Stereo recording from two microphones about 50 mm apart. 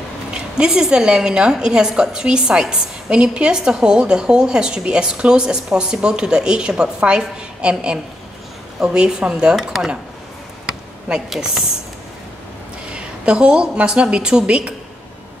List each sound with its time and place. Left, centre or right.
0.6 s a woman's voice: centre
9.6 s a woman's voice: centre
11.2 s a woman's voice: centre
12.8 s a woman's voice: right